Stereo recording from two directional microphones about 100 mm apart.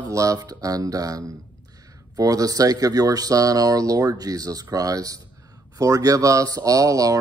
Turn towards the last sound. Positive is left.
turn(degrees=-35)  # may be behind; listen again after turning